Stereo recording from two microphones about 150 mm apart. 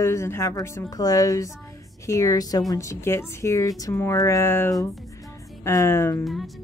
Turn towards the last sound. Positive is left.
turn(degrees=20)  # may be behind; listen again after turning